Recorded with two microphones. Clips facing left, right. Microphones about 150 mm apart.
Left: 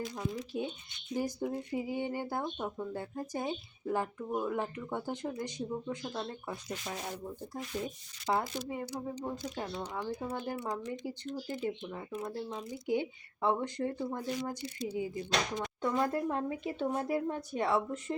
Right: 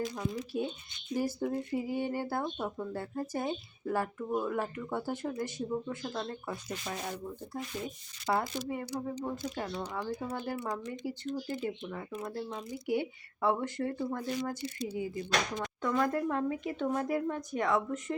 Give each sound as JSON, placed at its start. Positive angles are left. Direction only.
{"t": 0.5, "sound": "speech", "side_deg": 20}
{"t": 8.3, "sound": "speech", "side_deg": 20}